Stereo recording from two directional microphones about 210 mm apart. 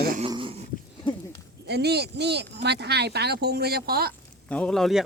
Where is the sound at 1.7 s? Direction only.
50° right (ahead or behind).